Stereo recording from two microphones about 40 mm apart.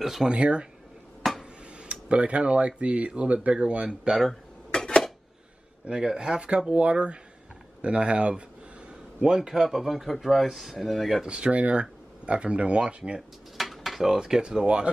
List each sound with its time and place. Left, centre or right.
0.0 s speech: centre
0.3 s speech: right
1.2 s a sound: centre
1.8 s speech: right
4.6 s dishes: centre
5.9 s speech: centre
6.7 s speech: right
9.5 s speech: centre
11.2 s speech: right
13.6 s a sound: centre
14.1 s speech: centre